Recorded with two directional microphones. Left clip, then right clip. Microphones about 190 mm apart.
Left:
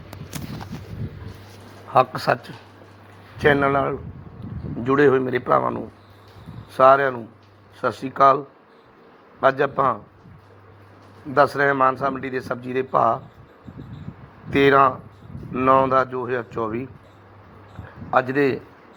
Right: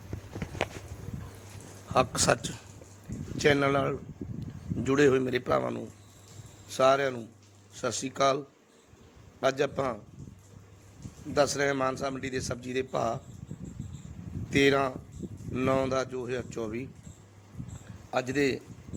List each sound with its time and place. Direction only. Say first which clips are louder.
1.9 s a man's voice: left 7 dB; 25° right (ahead or behind)
9.4 s a man's voice: left 9 dB; 30° right (ahead or behind)
11.6 s speech: left 10 dB; 30° right (ahead or behind)
14.6 s speech: left 10 dB; 30° right (ahead or behind)
18.1 s a man's voice: left 9 dB; 30° right (ahead or behind)